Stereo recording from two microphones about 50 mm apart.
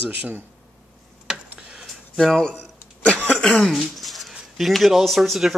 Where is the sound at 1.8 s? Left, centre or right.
Centre.